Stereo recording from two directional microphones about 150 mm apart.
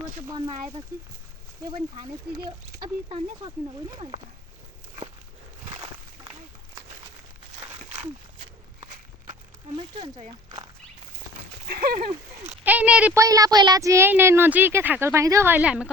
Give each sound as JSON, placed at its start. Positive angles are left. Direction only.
{"t": 0.3, "sound": "speech", "side_deg": -25}
{"t": 3.1, "sound": "speech", "side_deg": -40}
{"t": 7.6, "sound": "a sound", "side_deg": -20}
{"t": 10.0, "sound": "speech", "side_deg": -40}
{"t": 11.7, "sound": "speech", "side_deg": -85}
{"t": 12.6, "sound": "speech", "side_deg": -10}
{"t": 13.1, "sound": "speech", "side_deg": -25}